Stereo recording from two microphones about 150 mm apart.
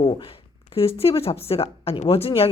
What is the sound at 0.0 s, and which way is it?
Speech, 35° left (ahead or behind).